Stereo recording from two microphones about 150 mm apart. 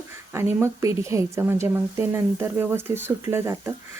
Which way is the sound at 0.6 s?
20° right (ahead or behind).